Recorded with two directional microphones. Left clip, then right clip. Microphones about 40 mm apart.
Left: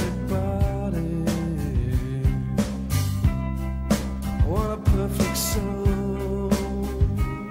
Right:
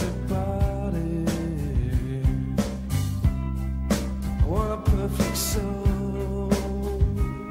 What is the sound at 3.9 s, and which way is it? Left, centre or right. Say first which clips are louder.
Music: left 1 dB; right.